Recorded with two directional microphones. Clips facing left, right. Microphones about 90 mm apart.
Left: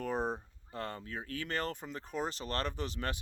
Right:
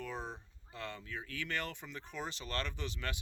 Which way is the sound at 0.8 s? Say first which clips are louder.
Left 4 dB; 40° left (ahead or behind).